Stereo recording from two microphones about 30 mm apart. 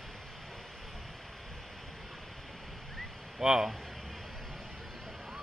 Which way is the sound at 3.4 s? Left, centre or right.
Centre.